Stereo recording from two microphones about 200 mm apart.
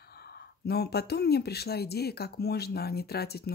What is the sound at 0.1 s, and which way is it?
Speech, 55° left (ahead or behind).